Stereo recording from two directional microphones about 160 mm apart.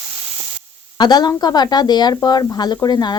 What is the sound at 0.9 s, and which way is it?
A woman's voice, 25° left (ahead or behind).